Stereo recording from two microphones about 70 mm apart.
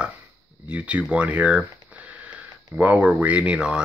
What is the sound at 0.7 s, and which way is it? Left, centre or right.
Speech, centre.